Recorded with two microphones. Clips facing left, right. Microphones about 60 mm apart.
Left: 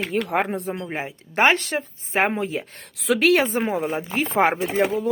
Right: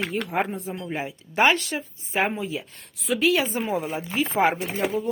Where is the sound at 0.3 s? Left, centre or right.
Left.